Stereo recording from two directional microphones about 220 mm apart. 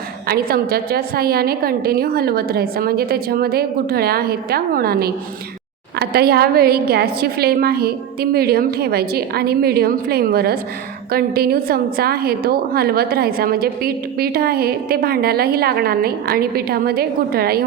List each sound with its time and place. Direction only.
0.3 s a woman's voice: 45° right (ahead or behind)